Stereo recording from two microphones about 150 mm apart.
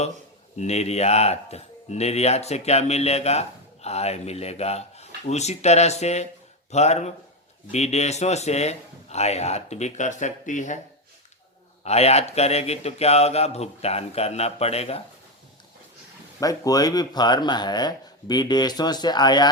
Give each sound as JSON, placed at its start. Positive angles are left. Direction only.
{"t": 0.6, "sound": "speech", "side_deg": 45}
{"t": 11.8, "sound": "speech", "side_deg": 45}
{"t": 16.4, "sound": "speech", "side_deg": 25}